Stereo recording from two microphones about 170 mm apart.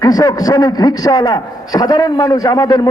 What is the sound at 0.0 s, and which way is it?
A man's voice, 20° left (ahead or behind).